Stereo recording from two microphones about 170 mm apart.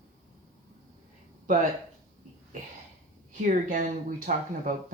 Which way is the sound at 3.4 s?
50° right (ahead or behind).